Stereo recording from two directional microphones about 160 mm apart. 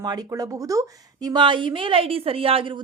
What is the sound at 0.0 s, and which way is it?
A woman's voice, 25° right (ahead or behind).